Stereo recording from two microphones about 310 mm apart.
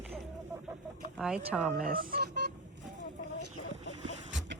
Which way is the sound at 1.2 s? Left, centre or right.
Centre.